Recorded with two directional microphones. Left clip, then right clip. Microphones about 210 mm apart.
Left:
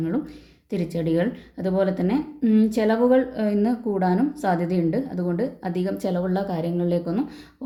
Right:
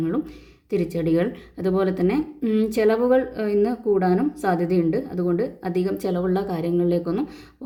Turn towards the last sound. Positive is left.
turn(degrees=-20)  # may be behind; listen again after turning